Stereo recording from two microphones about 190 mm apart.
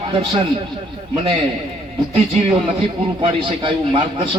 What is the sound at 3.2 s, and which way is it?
A man's voice, 25° right (ahead or behind).